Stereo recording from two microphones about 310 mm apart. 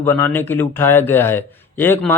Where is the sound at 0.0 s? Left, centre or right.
Centre.